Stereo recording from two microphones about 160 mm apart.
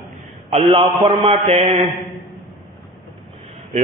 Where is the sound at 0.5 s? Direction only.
35° right (ahead or behind).